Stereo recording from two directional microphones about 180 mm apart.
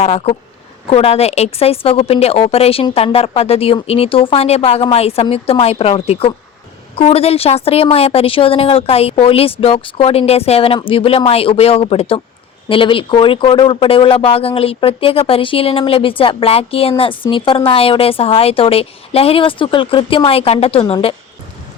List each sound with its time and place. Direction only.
0.0 s a woman's voice: 35° left (ahead or behind)